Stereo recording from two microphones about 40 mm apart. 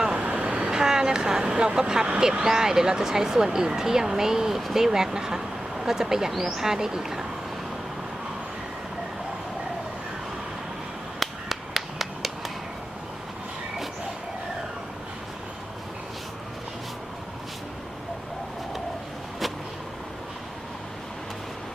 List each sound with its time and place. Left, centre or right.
0.1 s vehicle: right
0.7 s speech: centre
11.2 s a sound: centre